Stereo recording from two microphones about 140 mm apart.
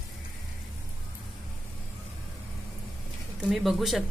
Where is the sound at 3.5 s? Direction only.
Centre (ahead or behind).